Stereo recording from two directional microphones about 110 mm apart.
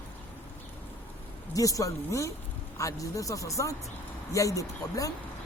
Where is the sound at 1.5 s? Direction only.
30° left (ahead or behind).